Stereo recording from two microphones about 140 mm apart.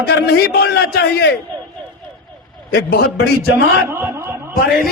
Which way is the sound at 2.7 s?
90° left.